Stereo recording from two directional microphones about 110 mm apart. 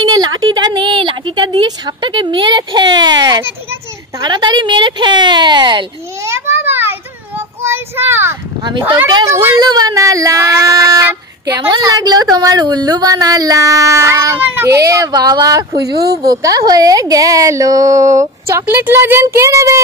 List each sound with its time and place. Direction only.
0.0 s a woman's voice: 40° right (ahead or behind)
6.2 s child singing: 25° right (ahead or behind)
9.6 s speech: 35° right (ahead or behind)
18.7 s speech: 20° right (ahead or behind)